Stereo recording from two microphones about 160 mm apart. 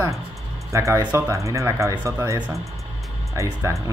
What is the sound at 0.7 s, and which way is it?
Speech, 20° right (ahead or behind).